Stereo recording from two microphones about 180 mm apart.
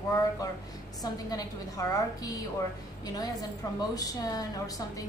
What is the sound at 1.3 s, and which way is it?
A woman's voice, 20° left (ahead or behind).